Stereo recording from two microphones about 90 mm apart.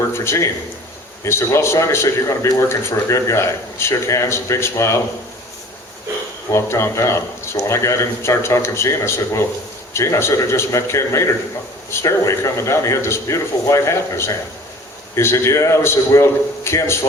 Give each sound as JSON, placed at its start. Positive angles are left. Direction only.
{"t": 0.1, "sound": "a man's voice", "side_deg": 30}
{"t": 6.5, "sound": "a man's voice", "side_deg": 30}